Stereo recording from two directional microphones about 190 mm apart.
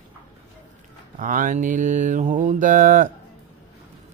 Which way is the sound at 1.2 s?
45° right (ahead or behind).